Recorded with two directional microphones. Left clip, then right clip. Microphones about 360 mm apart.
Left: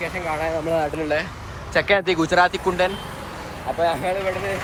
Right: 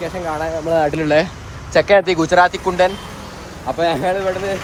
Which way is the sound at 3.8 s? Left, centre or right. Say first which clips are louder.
Right 3 dB; right.